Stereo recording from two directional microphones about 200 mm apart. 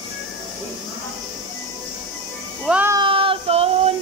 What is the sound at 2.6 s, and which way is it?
Music, 10° right (ahead or behind).